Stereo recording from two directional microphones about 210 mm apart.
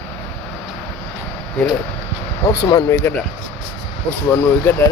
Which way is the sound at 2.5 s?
15° left (ahead or behind).